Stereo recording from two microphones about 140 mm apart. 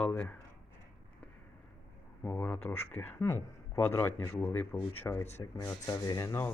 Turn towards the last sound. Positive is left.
turn(degrees=20)  # may be behind; listen again after turning